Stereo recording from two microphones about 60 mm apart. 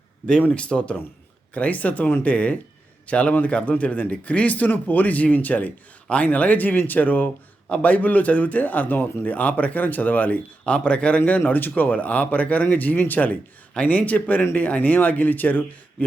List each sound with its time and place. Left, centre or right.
0.4 s speech: centre